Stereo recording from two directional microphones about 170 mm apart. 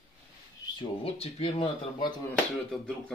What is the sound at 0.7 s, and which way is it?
Speech, 35° left (ahead or behind).